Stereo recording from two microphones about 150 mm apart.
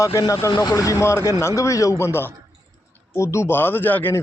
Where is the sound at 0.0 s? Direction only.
20° left (ahead or behind).